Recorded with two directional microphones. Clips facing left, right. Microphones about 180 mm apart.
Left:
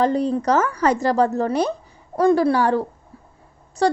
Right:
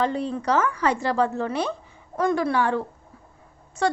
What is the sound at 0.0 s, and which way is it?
A woman's voice, 40° left (ahead or behind).